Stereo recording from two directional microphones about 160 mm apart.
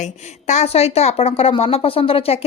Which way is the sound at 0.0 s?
45° left (ahead or behind).